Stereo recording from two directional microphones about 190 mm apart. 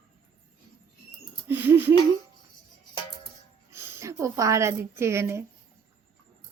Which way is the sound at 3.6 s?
15° right (ahead or behind).